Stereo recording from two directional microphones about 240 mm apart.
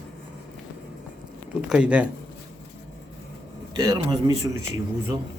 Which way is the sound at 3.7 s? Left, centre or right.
Centre.